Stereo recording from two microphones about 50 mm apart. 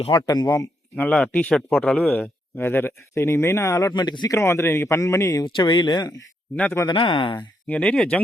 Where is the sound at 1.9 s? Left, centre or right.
Left.